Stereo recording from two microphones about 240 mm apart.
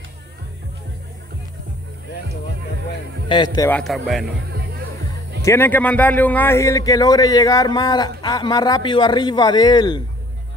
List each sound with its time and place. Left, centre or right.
3.3 s a man's voice: centre
3.8 s speech: centre
5.4 s a man's voice: centre